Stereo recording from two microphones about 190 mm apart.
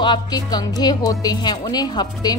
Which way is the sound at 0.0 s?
20° left (ahead or behind).